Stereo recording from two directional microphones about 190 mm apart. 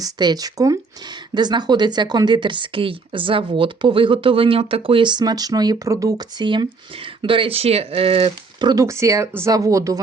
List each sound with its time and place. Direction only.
0.0 s speech: 20° right (ahead or behind)
8.7 s speech: 15° right (ahead or behind)